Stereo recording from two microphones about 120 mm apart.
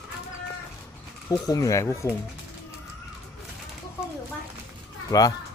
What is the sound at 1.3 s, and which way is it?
Speech, 30° left (ahead or behind).